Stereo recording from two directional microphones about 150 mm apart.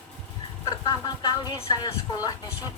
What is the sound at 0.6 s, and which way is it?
Speech, 25° left (ahead or behind).